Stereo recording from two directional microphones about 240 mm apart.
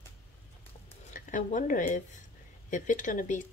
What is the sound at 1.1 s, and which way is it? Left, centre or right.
Speech, left.